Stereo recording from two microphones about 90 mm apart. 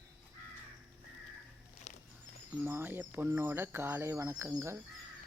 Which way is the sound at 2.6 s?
25° right (ahead or behind).